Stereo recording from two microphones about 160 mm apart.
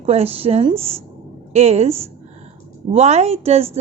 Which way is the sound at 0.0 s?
40° right (ahead or behind).